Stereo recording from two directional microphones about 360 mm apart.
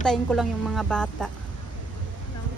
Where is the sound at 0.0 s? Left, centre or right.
Centre.